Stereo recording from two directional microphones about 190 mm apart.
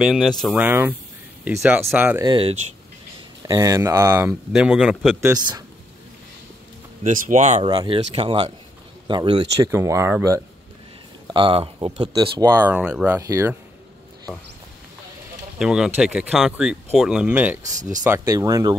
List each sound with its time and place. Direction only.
0.0 s speech: centre (ahead or behind)
2.2 s speech: 30° right (ahead or behind)
4.5 s speech: centre (ahead or behind)
7.0 s speech: 45° right (ahead or behind)
7.6 s speech: 25° right (ahead or behind)
9.7 s speech: 15° right (ahead or behind)
11.2 s speech: 25° right (ahead or behind)
12.7 s speech: 5° right (ahead or behind)
15.6 s speech: 5° right (ahead or behind)
17.7 s speech: 40° right (ahead or behind)
18.0 s speech: 15° right (ahead or behind)